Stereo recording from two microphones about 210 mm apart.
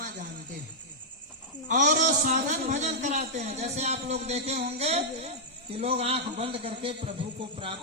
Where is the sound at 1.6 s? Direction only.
35° right (ahead or behind).